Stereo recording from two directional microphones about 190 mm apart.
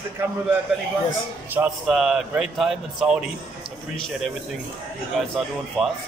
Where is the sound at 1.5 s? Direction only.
5° right (ahead or behind).